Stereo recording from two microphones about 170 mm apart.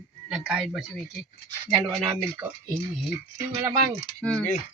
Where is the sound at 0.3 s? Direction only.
5° right (ahead or behind).